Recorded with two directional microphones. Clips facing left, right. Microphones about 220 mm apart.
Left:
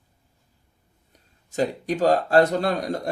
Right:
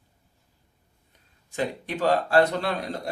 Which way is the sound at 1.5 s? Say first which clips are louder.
Left 5 dB; 40° left (ahead or behind).